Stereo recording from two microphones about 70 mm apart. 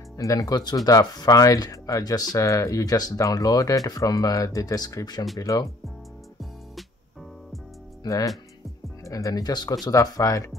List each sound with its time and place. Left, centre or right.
0.2 s speech: left
5.4 s speech: left
8.0 s speech: left
9.8 s speech: left